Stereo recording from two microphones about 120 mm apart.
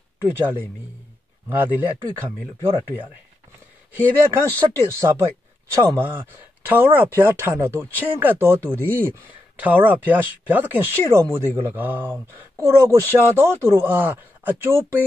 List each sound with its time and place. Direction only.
0.2 s speech: 20° right (ahead or behind)
3.9 s speech: 15° right (ahead or behind)